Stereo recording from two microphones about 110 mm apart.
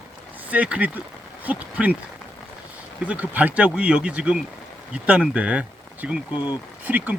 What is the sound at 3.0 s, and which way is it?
Speech, 15° right (ahead or behind).